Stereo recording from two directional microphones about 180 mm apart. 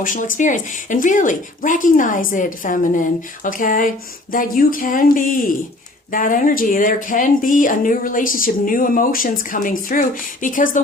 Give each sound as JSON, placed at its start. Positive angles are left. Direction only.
{"t": 0.0, "sound": "speech", "side_deg": 45}